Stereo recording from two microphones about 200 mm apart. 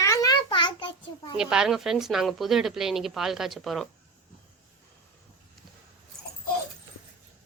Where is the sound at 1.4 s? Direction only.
5° right (ahead or behind).